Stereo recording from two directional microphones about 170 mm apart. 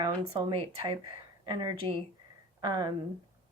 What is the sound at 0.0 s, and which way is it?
Speech, 25° right (ahead or behind).